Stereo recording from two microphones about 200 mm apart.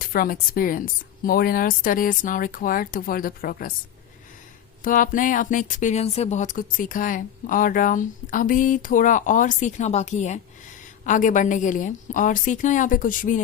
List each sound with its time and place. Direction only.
0.0 s a woman's voice: 45° left (ahead or behind)
4.8 s speech: 40° left (ahead or behind)